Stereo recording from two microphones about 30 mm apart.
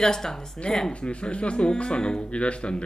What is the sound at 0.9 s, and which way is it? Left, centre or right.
A man's voice, left.